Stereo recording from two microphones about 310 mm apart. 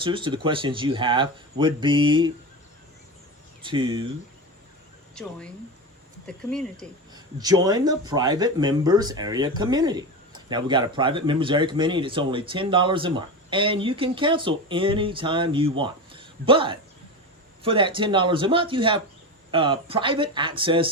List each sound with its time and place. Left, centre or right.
0.0 s speech: centre
3.6 s speech: centre
6.2 s speech: centre
7.1 s speech: centre
15.8 s a sound: centre
17.6 s speech: centre